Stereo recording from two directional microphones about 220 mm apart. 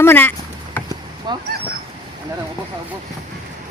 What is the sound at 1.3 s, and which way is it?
Speech, 20° right (ahead or behind).